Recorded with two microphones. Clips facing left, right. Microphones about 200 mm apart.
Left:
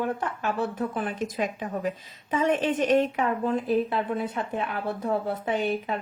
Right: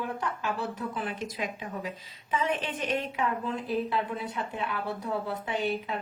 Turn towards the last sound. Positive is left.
turn(degrees=50)  # may be behind; listen again after turning